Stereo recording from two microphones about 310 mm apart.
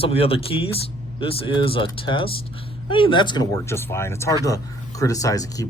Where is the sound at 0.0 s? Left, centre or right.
Centre.